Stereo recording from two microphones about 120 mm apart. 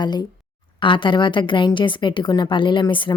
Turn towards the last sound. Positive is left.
turn(degrees=40)  # may be behind; listen again after turning